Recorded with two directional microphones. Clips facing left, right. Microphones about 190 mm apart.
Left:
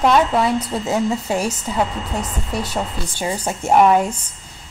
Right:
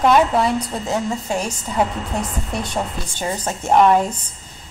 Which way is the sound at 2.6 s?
10° left (ahead or behind).